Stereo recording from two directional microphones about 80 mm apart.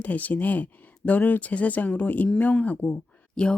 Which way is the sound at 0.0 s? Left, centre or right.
Left.